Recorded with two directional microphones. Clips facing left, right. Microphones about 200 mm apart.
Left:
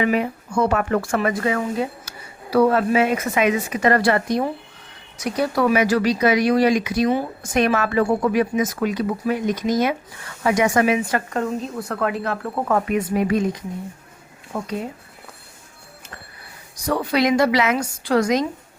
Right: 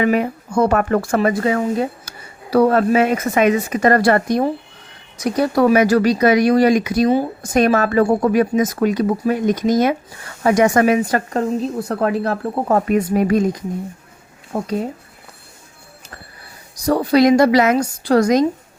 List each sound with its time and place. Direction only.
0.0 s speech: 45° right (ahead or behind)
16.7 s speech: 40° right (ahead or behind)